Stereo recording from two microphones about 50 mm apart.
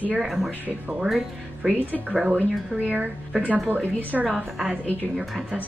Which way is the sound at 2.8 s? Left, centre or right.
Right.